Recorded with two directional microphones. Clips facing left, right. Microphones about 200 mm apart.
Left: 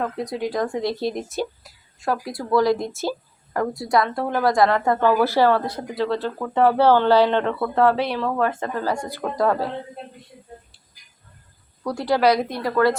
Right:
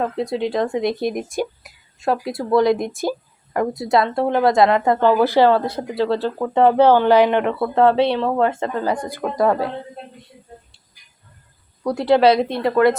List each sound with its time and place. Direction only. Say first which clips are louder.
0.0 s speech: right 4 dB; 25° right (ahead or behind)
11.8 s speech: right 5 dB; 20° right (ahead or behind)